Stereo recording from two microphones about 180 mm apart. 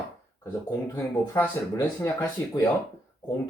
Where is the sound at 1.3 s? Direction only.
15° left (ahead or behind).